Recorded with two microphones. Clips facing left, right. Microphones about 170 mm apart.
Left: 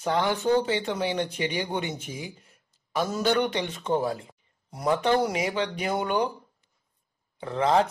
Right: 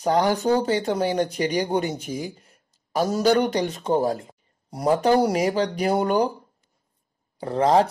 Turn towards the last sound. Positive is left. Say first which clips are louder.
# right 4 dB
turn(degrees=-35)  # may be behind; listen again after turning